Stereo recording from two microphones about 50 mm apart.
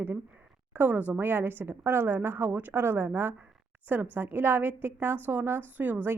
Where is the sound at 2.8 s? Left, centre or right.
Right.